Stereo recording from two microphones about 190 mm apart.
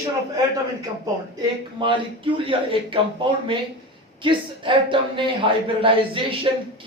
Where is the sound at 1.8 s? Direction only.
25° right (ahead or behind).